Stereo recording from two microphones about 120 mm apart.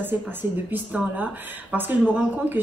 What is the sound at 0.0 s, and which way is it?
Speech, 15° right (ahead or behind).